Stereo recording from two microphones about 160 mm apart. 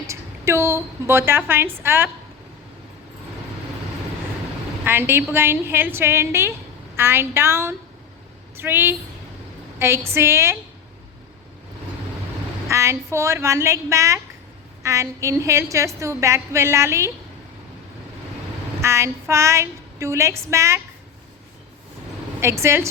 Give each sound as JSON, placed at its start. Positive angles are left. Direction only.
{"t": 0.1, "sound": "a woman's voice", "side_deg": -15}
{"t": 4.9, "sound": "child singing", "side_deg": -15}
{"t": 8.5, "sound": "a woman's voice", "side_deg": -15}
{"t": 9.7, "sound": "child singing", "side_deg": -15}
{"t": 12.6, "sound": "child singing", "side_deg": -20}
{"t": 14.8, "sound": "a woman's voice", "side_deg": -20}
{"t": 18.8, "sound": "child singing", "side_deg": -15}
{"t": 22.4, "sound": "child singing", "side_deg": -15}